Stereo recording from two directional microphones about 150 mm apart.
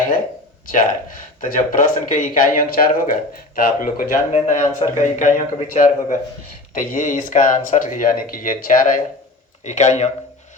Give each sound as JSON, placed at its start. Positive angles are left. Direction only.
{"t": 0.7, "sound": "speech", "side_deg": 60}
{"t": 4.3, "sound": "speech", "side_deg": 50}
{"t": 9.6, "sound": "speech", "side_deg": 50}